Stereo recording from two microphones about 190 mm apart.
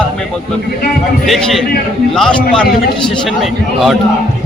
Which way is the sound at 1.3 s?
Centre (ahead or behind).